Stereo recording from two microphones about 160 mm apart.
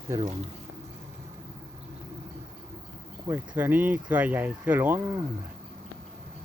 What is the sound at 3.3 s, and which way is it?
Speech, 10° right (ahead or behind).